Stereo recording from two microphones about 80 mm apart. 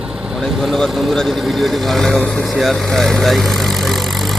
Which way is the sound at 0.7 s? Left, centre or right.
Centre.